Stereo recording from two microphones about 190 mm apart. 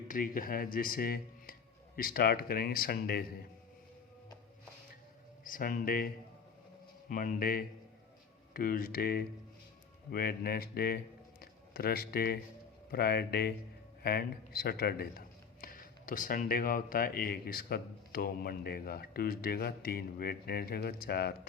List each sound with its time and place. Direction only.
0.1 s speech: 45° left (ahead or behind)
5.4 s speech: 45° left (ahead or behind)
7.1 s speech: 45° left (ahead or behind)